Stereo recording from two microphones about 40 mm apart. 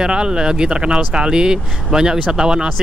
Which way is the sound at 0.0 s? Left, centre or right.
Right.